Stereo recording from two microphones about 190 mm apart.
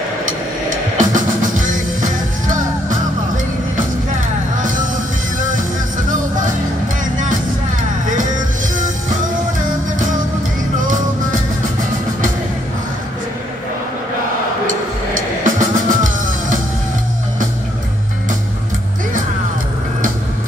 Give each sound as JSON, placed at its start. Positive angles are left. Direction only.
{"t": 0.9, "sound": "music", "side_deg": -45}
{"t": 15.4, "sound": "music", "side_deg": -45}